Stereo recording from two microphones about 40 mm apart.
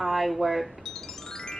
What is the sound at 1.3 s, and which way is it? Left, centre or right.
Music, centre.